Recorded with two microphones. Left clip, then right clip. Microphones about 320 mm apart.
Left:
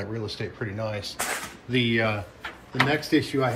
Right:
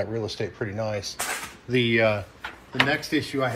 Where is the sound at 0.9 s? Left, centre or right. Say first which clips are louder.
Right 1 dB; centre.